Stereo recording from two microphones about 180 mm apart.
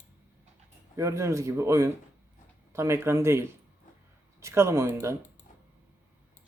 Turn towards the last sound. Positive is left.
turn(degrees=-15)  # may be behind; listen again after turning